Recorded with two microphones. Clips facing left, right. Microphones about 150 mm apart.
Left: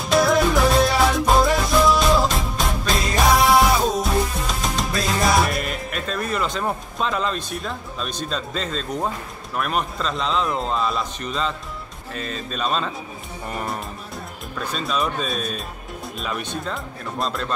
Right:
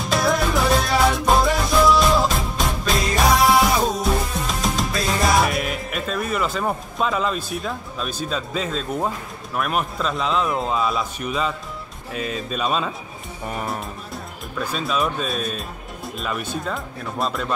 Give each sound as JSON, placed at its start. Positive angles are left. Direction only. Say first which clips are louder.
{"t": 0.0, "sound": "music", "louder": "left 3 dB", "side_deg": 0}
{"t": 9.6, "sound": "a man's voice", "louder": "right 1 dB", "side_deg": -5}